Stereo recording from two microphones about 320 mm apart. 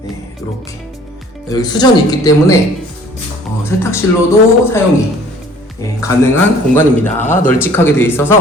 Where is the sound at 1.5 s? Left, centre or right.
Centre.